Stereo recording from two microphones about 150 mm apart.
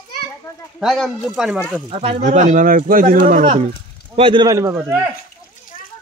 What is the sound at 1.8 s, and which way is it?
Speech, 45° right (ahead or behind).